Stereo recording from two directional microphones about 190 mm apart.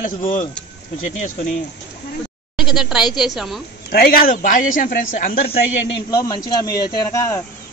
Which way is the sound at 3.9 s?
50° left (ahead or behind).